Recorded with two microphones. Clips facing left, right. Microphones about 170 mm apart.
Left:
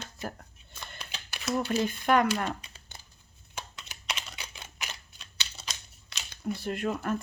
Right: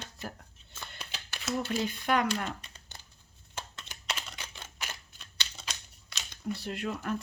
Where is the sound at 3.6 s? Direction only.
15° left (ahead or behind).